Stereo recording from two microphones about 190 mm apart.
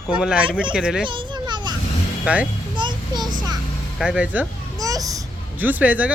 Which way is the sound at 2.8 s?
25° right (ahead or behind).